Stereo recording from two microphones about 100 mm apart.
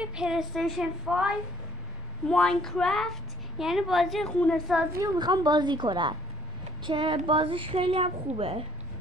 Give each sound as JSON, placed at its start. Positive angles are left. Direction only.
{"t": 0.0, "sound": "a woman's voice", "side_deg": -10}
{"t": 2.2, "sound": "a woman's voice", "side_deg": 5}
{"t": 4.3, "sound": "a woman's voice", "side_deg": 10}
{"t": 5.2, "sound": "a woman's voice", "side_deg": -45}